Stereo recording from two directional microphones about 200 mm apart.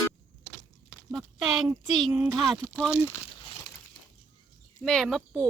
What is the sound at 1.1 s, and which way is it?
Speech, centre (ahead or behind).